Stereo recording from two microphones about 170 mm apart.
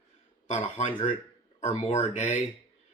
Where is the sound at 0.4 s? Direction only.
45° left (ahead or behind).